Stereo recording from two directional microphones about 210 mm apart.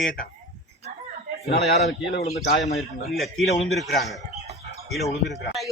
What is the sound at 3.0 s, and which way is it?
Speech, 45° left (ahead or behind).